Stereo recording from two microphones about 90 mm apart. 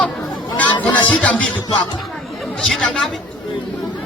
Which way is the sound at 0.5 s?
15° left (ahead or behind).